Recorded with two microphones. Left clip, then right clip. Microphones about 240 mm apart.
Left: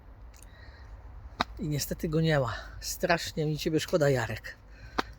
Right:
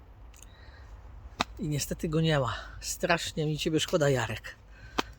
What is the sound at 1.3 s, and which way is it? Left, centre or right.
Speech, centre.